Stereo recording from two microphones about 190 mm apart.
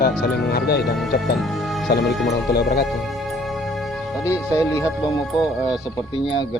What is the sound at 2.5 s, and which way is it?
Speech, 55° left (ahead or behind).